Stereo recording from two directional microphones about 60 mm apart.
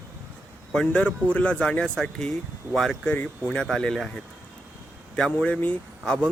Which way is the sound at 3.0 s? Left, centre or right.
Left.